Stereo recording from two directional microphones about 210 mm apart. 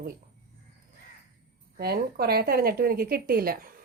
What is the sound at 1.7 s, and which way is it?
Speech, 50° right (ahead or behind).